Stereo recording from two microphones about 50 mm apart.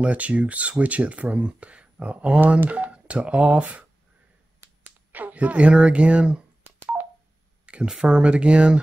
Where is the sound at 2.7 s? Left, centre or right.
Right.